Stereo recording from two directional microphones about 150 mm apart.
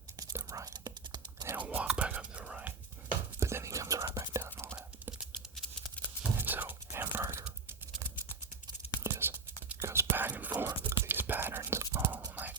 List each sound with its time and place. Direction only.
0.2 s whispering: 25° right (ahead or behind)
1.5 s whispering: 10° right (ahead or behind)
3.4 s whispering: 20° right (ahead or behind)
5.2 s a sound: centre (ahead or behind)
6.3 s whispering: 10° right (ahead or behind)
9.0 s whispering: 15° right (ahead or behind)